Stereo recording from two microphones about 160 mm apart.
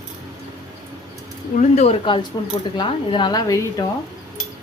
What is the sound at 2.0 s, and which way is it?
A woman's voice, 30° left (ahead or behind).